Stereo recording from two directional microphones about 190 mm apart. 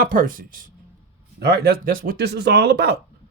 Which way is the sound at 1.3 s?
55° right (ahead or behind).